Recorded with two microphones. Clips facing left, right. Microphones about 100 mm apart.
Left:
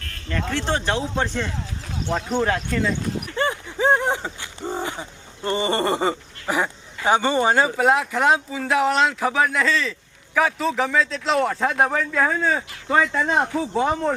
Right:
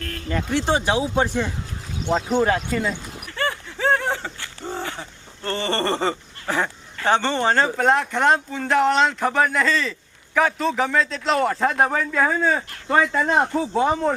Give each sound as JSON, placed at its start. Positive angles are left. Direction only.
{"t": 0.5, "sound": "a man's voice", "side_deg": -15}
{"t": 3.3, "sound": "a sound", "side_deg": 20}
{"t": 7.8, "sound": "a man's voice", "side_deg": 5}